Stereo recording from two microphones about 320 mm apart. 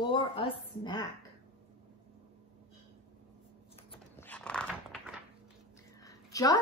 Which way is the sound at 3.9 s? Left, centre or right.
Centre.